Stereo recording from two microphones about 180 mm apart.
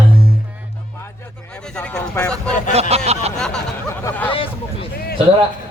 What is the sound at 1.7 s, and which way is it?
Speech, 5° left (ahead or behind).